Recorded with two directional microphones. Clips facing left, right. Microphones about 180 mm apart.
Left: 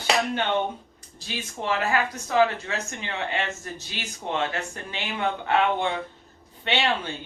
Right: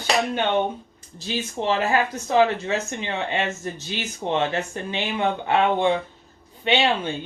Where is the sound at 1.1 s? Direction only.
25° right (ahead or behind).